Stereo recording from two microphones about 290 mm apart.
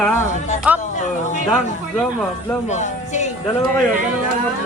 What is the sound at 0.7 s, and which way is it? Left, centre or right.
Speech, centre.